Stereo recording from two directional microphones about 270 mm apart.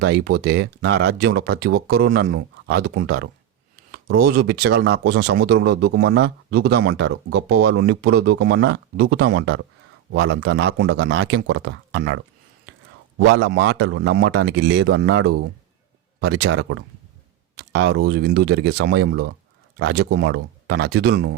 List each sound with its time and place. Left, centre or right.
0.0 s speech: right